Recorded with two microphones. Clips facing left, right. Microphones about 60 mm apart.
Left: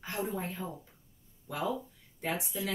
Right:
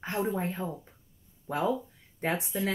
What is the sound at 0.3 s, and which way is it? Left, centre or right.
A woman's voice, right.